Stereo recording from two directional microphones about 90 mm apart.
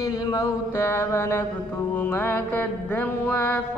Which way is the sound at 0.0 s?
40° left (ahead or behind).